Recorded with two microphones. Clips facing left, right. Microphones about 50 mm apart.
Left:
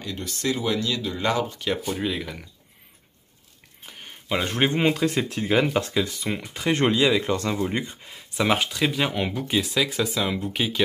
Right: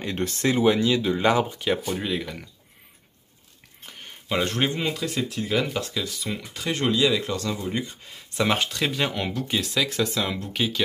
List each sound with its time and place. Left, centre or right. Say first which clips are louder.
0.0 s speech: right 5 dB; right
0.4 s speech: right 5 dB; right; by 2.3 s centre
3.8 s a sound: even; centre
4.6 s speech: left 4 dB; left
8.1 s speech: left 1 dB; centre